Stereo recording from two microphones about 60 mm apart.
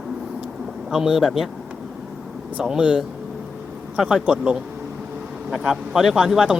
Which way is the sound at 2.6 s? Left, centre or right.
Centre.